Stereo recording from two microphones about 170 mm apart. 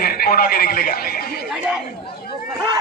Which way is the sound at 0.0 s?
60° left (ahead or behind).